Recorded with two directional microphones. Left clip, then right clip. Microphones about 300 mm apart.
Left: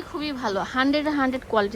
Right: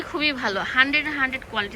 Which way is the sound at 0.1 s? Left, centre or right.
Centre.